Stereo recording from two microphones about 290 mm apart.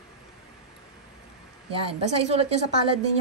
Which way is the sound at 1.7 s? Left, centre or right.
Centre.